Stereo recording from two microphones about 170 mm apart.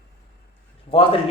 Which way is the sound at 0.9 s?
30° left (ahead or behind).